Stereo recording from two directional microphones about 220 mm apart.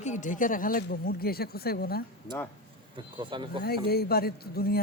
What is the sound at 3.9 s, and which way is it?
Speech, 45° left (ahead or behind).